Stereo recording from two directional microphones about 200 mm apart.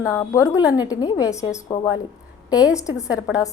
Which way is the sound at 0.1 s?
15° left (ahead or behind).